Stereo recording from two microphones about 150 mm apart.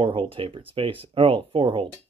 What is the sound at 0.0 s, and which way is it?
Speech, 35° right (ahead or behind).